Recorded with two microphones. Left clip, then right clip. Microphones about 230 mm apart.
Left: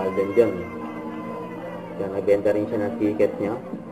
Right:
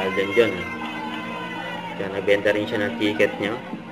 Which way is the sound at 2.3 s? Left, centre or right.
Right.